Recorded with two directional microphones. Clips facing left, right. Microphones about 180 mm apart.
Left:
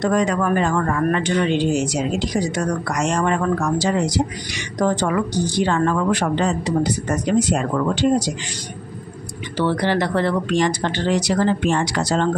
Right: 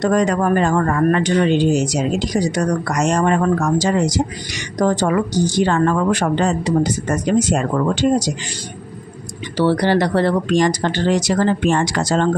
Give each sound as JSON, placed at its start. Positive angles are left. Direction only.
{"t": 0.0, "sound": "speech", "side_deg": -40}
{"t": 5.5, "sound": "speech", "side_deg": -45}
{"t": 9.6, "sound": "speech", "side_deg": -40}